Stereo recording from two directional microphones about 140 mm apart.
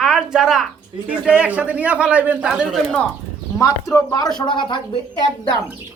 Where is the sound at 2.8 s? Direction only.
5° left (ahead or behind).